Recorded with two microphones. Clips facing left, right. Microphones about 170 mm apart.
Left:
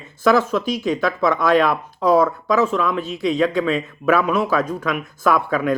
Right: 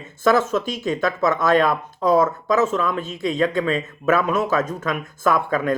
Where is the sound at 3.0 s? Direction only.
45° right (ahead or behind).